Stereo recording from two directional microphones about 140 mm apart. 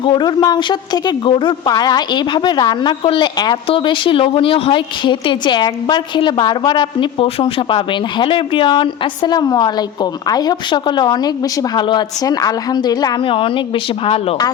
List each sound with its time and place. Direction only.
0.0 s a woman's voice: 30° left (ahead or behind)